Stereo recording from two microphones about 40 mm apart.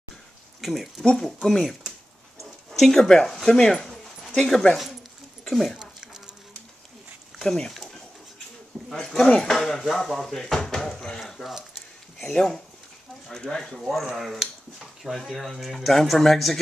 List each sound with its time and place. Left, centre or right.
0.6 s a man's voice: centre
2.9 s speech: centre
3.5 s speech: centre
3.8 s dog: centre
5.4 s speech: centre
5.8 s a sound: centre
7.4 s speech: centre
8.9 s speech: centre
11.1 s a sound: centre
12.2 s speech: centre
13.7 s a man's voice: centre